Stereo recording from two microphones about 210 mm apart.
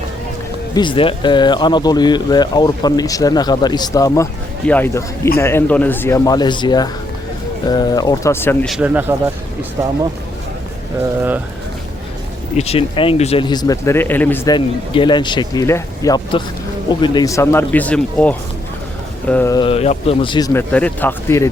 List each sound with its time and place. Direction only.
0.7 s speech: 20° left (ahead or behind)
8.7 s speech: 10° right (ahead or behind)
12.5 s speech: 30° left (ahead or behind); by 14.5 s 10° left (ahead or behind)
14.5 s speech: 20° left (ahead or behind)
20.5 s speech: 10° left (ahead or behind)